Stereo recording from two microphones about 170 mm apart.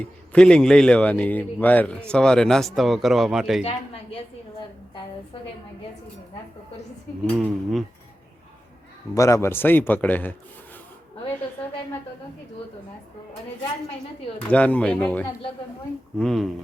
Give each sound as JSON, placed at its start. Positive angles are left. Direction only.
{"t": 0.0, "sound": "a man's voice", "side_deg": 5}
{"t": 3.6, "sound": "speech", "side_deg": 35}
{"t": 7.3, "sound": "a man's voice", "side_deg": 0}
{"t": 9.1, "sound": "a man's voice", "side_deg": 20}
{"t": 14.5, "sound": "a man's voice", "side_deg": 5}